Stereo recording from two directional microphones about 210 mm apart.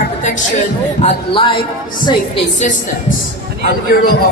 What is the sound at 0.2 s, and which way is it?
Speech, 35° left (ahead or behind).